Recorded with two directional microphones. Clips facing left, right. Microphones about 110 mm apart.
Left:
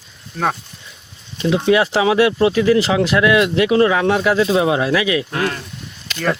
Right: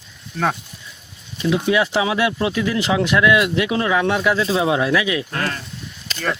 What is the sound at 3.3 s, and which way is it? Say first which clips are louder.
Speech: left 5 dB; 35° left (ahead or behind).